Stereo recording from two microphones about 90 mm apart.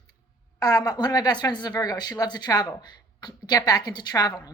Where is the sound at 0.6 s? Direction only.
45° left (ahead or behind).